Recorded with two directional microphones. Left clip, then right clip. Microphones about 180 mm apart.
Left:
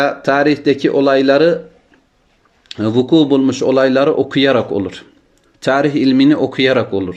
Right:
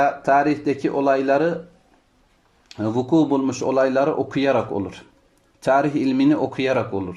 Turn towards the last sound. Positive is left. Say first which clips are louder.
# left 8 dB
turn(degrees=-10)  # may be behind; listen again after turning